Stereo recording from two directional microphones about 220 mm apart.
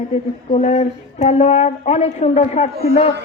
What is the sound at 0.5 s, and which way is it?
A woman's voice, 30° left (ahead or behind).